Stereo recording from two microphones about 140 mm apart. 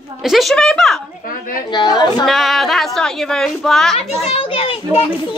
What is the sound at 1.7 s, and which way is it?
Speech, 30° left (ahead or behind).